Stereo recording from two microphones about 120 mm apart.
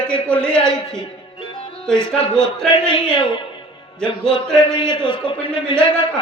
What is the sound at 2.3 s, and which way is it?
Speech, 5° left (ahead or behind).